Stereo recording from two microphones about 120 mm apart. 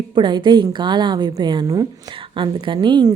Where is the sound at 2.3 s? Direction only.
45° right (ahead or behind).